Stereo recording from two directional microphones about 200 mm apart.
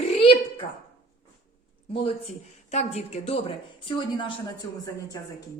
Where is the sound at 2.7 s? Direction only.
30° left (ahead or behind).